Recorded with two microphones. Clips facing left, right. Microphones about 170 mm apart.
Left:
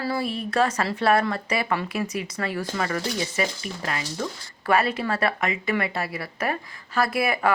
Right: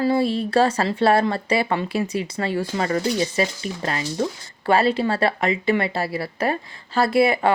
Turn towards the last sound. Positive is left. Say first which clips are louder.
# right 5 dB
turn(degrees=-25)  # may be behind; listen again after turning